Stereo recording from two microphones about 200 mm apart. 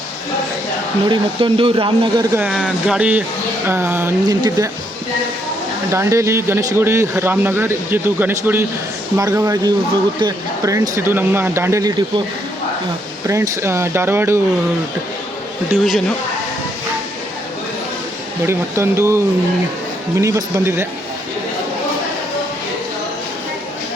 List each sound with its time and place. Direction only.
1.1 s speech: 25° right (ahead or behind)
2.3 s speech: 5° right (ahead or behind)
5.9 s speech: 15° right (ahead or behind)
13.2 s speech: 15° right (ahead or behind)
15.7 s speech: centre (ahead or behind)
18.4 s speech: 15° right (ahead or behind)